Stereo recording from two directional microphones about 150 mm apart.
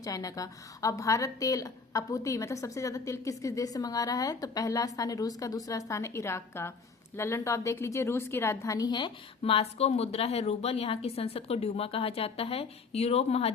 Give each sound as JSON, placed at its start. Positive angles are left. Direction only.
{"t": 0.0, "sound": "a woman's voice", "side_deg": 25}